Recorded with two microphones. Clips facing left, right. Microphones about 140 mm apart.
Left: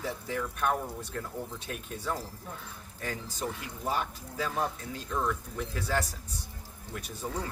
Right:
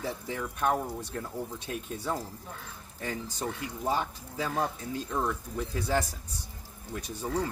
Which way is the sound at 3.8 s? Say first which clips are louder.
Right 2 dB; 15° right (ahead or behind).